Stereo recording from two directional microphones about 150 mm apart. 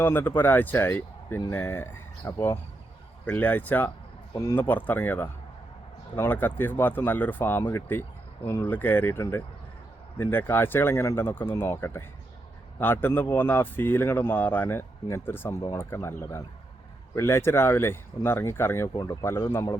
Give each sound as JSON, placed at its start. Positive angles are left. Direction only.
{"t": 0.0, "sound": "speech", "side_deg": 15}